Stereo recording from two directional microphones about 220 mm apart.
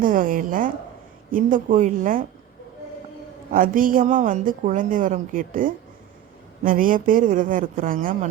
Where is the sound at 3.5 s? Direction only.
40° right (ahead or behind).